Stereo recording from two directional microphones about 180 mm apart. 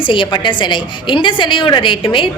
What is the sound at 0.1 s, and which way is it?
A woman's voice, 25° left (ahead or behind).